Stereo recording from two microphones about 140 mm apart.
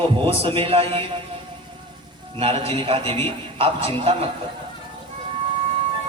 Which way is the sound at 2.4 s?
40° right (ahead or behind).